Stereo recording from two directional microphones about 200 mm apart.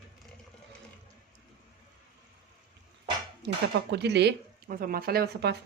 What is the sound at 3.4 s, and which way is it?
Speech, 60° right (ahead or behind).